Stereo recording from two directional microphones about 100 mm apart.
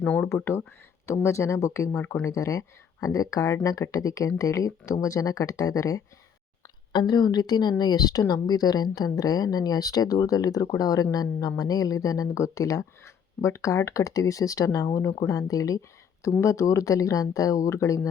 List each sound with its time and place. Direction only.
0.0 s a woman's voice: 15° left (ahead or behind); by 6.0 s 35° left (ahead or behind)
6.9 s a woman's voice: 45° left (ahead or behind)